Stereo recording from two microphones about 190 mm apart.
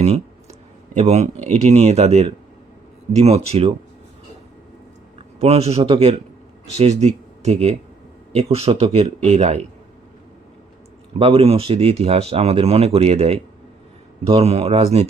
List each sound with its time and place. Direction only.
0.9 s speech: 35° right (ahead or behind)
5.4 s speech: 35° right (ahead or behind)
11.2 s speech: 30° right (ahead or behind)